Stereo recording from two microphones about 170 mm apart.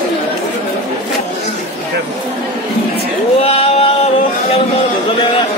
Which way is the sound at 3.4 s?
35° left (ahead or behind).